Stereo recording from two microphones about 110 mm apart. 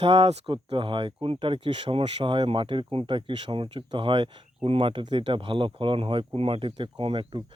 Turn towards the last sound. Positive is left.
turn(degrees=-50)  # may be behind; listen again after turning